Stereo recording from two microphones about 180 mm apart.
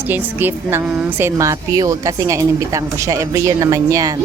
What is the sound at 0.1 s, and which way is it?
A woman's voice, 10° right (ahead or behind).